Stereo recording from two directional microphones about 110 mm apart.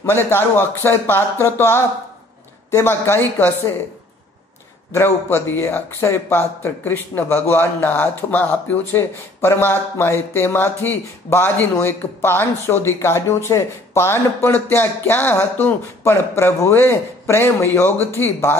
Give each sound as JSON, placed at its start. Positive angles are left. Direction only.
{"t": 0.0, "sound": "speech", "side_deg": 20}
{"t": 4.9, "sound": "speech", "side_deg": 25}